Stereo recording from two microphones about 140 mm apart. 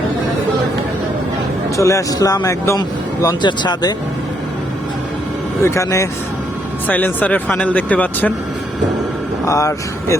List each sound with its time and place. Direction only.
1.7 s a man's voice: 20° left (ahead or behind)
5.6 s a man's voice: 20° left (ahead or behind)
9.5 s a man's voice: 20° left (ahead or behind)